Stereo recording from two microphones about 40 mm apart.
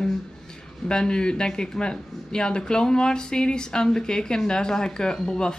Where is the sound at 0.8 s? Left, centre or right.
Left.